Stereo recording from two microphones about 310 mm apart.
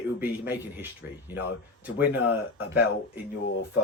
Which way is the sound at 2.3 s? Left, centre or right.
Left.